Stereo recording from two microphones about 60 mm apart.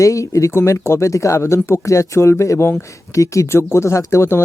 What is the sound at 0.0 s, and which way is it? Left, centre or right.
Speech, left.